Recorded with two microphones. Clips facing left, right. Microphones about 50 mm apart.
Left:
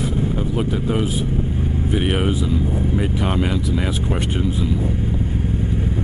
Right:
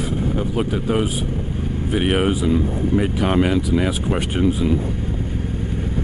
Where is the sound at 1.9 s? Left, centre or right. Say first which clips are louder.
Right 3 dB; centre.